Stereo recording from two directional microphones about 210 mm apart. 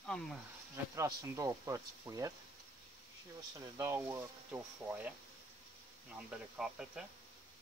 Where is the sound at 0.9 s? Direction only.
15° right (ahead or behind).